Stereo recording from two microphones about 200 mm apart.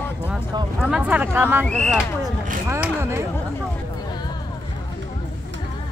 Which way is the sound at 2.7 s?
15° right (ahead or behind).